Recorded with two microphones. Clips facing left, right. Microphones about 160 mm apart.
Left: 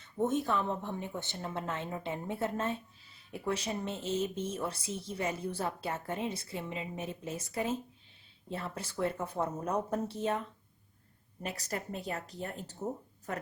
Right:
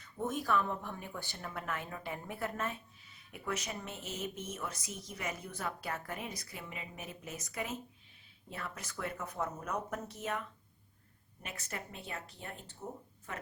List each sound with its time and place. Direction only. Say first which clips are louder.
0.0 s speech: left 6 dB; 25° left (ahead or behind)
11.4 s speech: left 7 dB; 35° left (ahead or behind)